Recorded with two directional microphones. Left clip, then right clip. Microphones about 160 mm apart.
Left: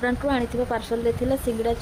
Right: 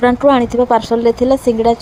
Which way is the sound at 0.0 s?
40° right (ahead or behind).